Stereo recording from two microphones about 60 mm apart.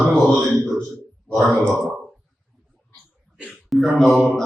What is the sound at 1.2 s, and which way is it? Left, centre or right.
Speech, centre.